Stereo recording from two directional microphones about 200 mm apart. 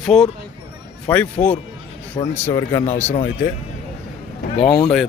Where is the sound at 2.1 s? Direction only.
25° left (ahead or behind).